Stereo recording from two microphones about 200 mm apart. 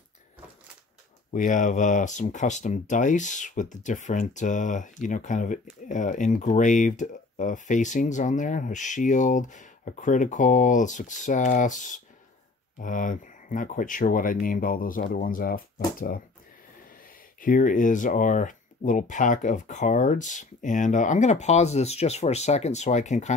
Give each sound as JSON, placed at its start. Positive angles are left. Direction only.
{"t": 1.3, "sound": "speech", "side_deg": 40}
{"t": 17.4, "sound": "speech", "side_deg": 40}